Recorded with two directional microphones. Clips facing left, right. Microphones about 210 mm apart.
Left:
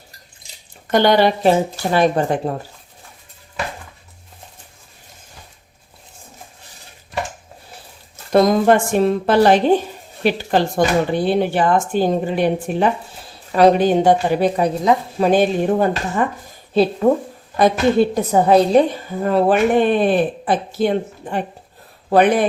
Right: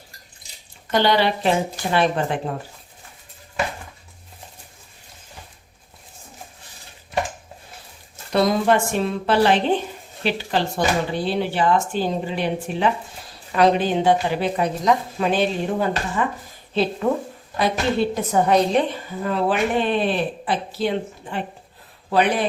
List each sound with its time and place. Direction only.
0.9 s a woman's voice: 50° left (ahead or behind)
8.3 s a woman's voice: 45° left (ahead or behind)
14.5 s a woman's voice: 35° left (ahead or behind); by 22.4 s 50° left (ahead or behind)